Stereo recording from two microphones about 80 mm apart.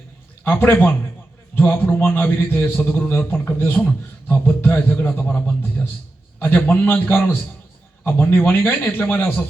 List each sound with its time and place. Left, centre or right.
0.4 s a man's voice: left